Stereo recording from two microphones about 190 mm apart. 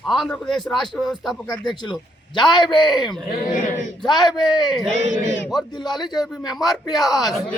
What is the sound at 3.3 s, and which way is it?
Speech, 40° left (ahead or behind).